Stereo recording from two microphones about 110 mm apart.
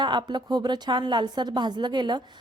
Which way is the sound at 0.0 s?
45° right (ahead or behind).